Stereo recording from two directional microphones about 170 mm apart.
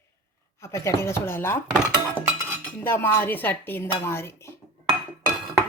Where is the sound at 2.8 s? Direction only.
15° left (ahead or behind).